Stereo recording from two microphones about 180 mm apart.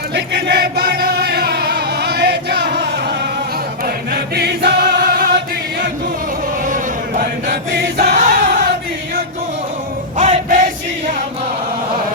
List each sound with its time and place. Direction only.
0.1 s chant: 65° right (ahead or behind)
3.8 s choir: 60° right (ahead or behind)
7.2 s chant: 55° right (ahead or behind)
10.2 s music: 45° right (ahead or behind)